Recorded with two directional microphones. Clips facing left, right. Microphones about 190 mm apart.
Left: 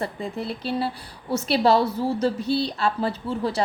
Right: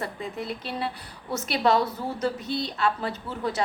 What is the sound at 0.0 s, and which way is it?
A woman's voice, 30° left (ahead or behind).